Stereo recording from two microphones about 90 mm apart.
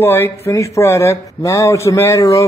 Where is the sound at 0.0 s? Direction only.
25° left (ahead or behind).